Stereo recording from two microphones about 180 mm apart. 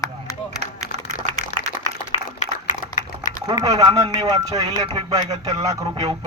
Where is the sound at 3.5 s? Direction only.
20° right (ahead or behind).